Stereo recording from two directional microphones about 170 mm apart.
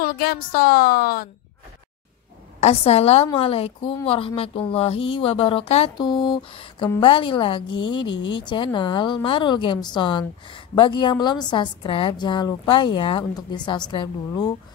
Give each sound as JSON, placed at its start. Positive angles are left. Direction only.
{"t": 0.0, "sound": "a woman's voice", "side_deg": 65}
{"t": 2.6, "sound": "a woman's voice", "side_deg": 35}